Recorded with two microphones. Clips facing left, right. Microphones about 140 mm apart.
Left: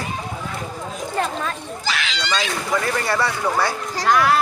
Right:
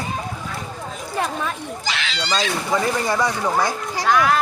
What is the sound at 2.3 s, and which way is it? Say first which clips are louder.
Speech: right 2 dB; 30° right (ahead or behind).